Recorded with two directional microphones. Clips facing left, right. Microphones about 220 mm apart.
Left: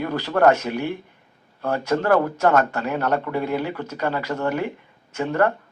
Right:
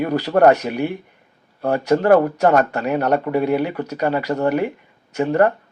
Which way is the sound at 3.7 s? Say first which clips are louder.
Right 4 dB; 35° right (ahead or behind).